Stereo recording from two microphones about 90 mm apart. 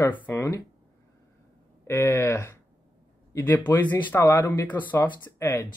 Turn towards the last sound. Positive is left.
turn(degrees=30)  # may be behind; listen again after turning